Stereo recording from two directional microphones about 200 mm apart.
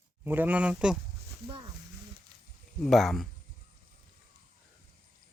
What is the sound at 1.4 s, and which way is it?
Speech, 25° right (ahead or behind).